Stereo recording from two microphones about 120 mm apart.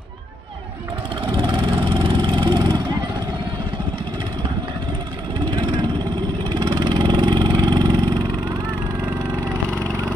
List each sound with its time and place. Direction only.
1.3 s vehicle: 40° right (ahead or behind)
5.5 s vehicle: 35° right (ahead or behind)